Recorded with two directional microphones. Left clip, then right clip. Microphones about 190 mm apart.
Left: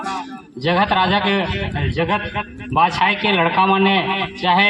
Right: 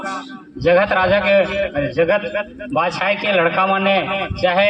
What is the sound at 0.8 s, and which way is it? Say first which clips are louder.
Speech: right 1 dB; 30° left (ahead or behind).